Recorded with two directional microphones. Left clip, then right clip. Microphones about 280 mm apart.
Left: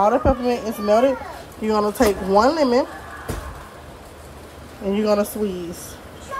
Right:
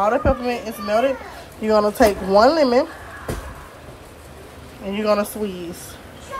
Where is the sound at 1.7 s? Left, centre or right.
Centre.